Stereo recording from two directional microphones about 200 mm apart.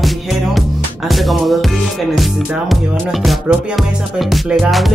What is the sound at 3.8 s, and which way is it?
Speech, centre (ahead or behind).